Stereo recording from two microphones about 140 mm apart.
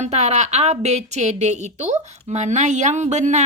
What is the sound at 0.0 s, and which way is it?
A woman's voice, 55° right (ahead or behind).